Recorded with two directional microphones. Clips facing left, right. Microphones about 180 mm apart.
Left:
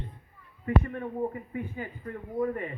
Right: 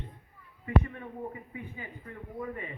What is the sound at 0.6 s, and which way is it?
A man's voice, 50° left (ahead or behind).